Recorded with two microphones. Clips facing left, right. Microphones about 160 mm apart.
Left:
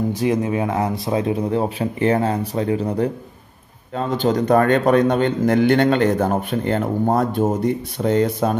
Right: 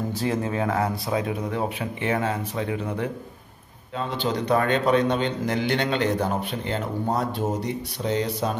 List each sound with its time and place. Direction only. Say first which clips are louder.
0.1 s speech: left 6 dB; 15° left (ahead or behind); by 3.1 s 35° left (ahead or behind)
3.9 s a man's voice: left 7 dB; 45° left (ahead or behind)